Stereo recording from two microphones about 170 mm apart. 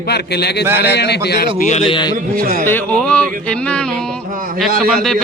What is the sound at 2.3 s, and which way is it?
Speech, 55° right (ahead or behind).